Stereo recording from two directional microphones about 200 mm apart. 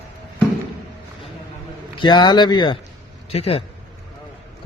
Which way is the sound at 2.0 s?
20° left (ahead or behind).